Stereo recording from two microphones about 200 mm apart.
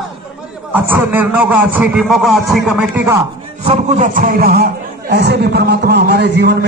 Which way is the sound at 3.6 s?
35° right (ahead or behind).